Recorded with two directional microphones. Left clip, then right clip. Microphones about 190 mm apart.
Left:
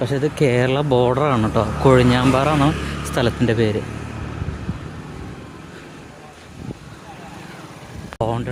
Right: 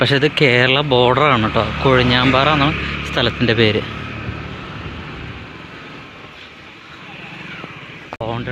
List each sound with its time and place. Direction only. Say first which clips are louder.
0.0 s speech: right 5 dB; 10° left (ahead or behind)
2.6 s vehicle: right 3 dB; centre (ahead or behind)
3.2 s speech: right 3 dB; 20° left (ahead or behind)
8.2 s vehicle: left 2 dB; 20° left (ahead or behind)